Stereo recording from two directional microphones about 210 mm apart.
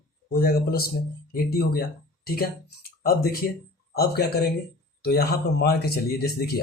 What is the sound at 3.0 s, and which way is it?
Speech, 45° left (ahead or behind).